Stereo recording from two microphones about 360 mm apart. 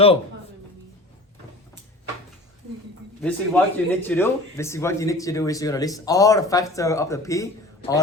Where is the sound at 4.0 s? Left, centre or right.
Centre.